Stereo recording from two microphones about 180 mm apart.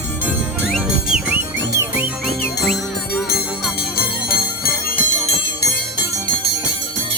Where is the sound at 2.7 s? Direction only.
Centre (ahead or behind).